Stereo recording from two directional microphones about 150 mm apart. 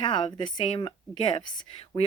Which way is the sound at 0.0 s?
35° left (ahead or behind).